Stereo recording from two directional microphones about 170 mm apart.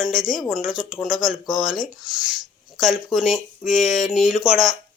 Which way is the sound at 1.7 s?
Centre (ahead or behind).